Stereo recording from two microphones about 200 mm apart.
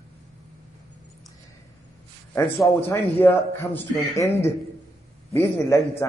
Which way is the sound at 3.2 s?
10° left (ahead or behind).